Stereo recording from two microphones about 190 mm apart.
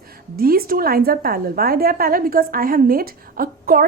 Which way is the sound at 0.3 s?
50° right (ahead or behind).